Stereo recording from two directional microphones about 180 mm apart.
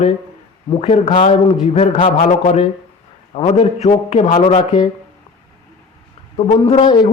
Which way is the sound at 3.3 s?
35° left (ahead or behind).